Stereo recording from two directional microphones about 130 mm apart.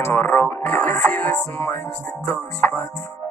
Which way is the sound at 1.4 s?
20° left (ahead or behind).